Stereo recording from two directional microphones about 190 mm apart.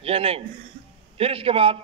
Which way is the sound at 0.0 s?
30° right (ahead or behind).